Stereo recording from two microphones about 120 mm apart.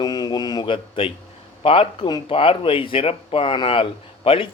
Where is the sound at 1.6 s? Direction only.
50° left (ahead or behind).